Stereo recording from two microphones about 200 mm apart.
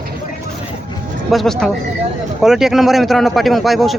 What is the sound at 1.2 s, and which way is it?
A man's voice, centre (ahead or behind).